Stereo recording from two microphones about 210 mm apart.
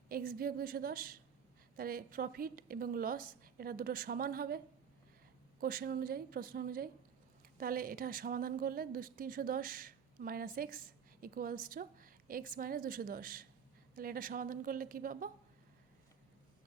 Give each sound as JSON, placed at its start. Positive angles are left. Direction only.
{"t": 0.1, "sound": "a woman's voice", "side_deg": -45}